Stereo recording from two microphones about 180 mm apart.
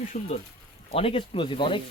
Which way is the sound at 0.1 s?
50° left (ahead or behind).